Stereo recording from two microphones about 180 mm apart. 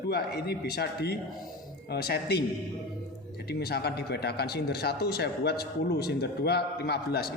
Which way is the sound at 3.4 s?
65° left (ahead or behind).